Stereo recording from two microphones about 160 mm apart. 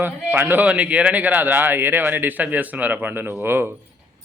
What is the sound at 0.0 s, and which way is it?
Speech, 10° right (ahead or behind).